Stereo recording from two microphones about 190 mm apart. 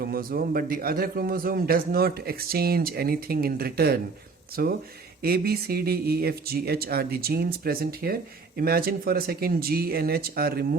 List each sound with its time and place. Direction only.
0.0 s speech: 50° right (ahead or behind)